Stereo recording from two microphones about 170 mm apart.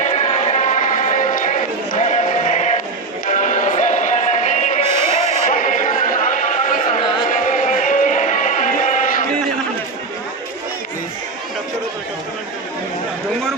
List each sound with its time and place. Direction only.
0.0 s music: 40° left (ahead or behind)